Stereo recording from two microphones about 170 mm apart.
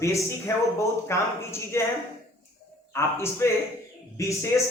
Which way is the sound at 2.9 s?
15° left (ahead or behind).